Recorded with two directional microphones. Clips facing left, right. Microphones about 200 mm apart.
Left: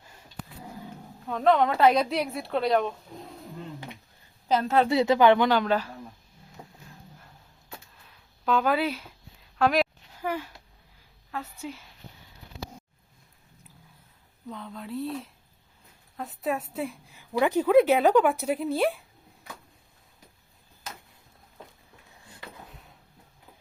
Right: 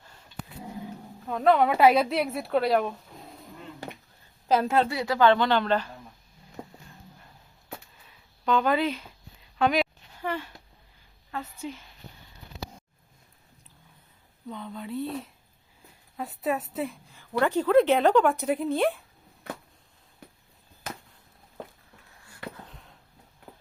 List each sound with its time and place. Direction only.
1.3 s a woman's voice: 5° right (ahead or behind)
4.4 s a woman's voice: centre (ahead or behind)
4.9 s speech: 20° left (ahead or behind)
6.6 s a sound: 55° right (ahead or behind)
7.9 s a sound: centre (ahead or behind)
11.3 s speech: 5° left (ahead or behind)
14.4 s a woman's voice: centre (ahead or behind)
17.2 s speech: 10° left (ahead or behind)
22.7 s a sound: 5° left (ahead or behind)